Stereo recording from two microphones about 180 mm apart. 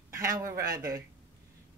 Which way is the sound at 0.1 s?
15° right (ahead or behind).